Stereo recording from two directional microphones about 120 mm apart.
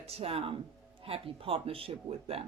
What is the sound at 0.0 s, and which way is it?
Speech, 55° right (ahead or behind).